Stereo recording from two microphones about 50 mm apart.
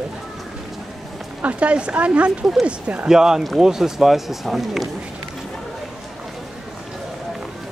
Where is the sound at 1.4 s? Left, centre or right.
Right.